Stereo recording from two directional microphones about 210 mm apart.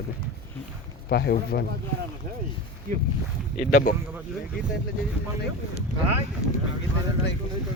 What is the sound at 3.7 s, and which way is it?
Speech, 40° left (ahead or behind).